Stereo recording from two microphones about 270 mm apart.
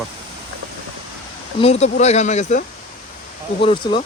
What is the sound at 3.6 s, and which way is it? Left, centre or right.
Speech, centre.